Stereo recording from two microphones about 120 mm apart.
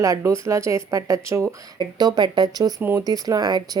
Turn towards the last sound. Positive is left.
turn(degrees=-35)  # may be behind; listen again after turning